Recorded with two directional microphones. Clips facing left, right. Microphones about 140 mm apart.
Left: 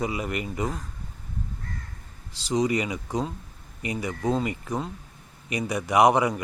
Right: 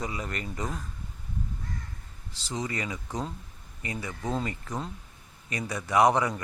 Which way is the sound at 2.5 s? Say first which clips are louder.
Left 9 dB; 15° left (ahead or behind).